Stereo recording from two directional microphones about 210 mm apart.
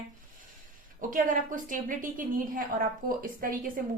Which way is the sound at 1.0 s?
40° right (ahead or behind).